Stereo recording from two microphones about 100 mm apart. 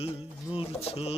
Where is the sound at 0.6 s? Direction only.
75° left (ahead or behind).